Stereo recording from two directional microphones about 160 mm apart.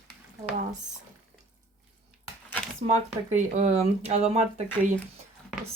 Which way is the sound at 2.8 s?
45° right (ahead or behind).